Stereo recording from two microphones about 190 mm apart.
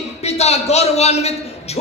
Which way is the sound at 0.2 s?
35° left (ahead or behind).